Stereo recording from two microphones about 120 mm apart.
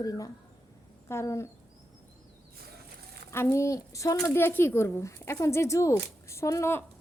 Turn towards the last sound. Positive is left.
turn(degrees=20)  # may be behind; listen again after turning